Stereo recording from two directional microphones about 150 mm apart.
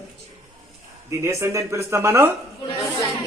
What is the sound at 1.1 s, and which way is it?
A man's voice, 20° right (ahead or behind).